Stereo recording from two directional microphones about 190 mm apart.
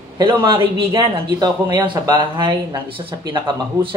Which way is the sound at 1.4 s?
25° right (ahead or behind).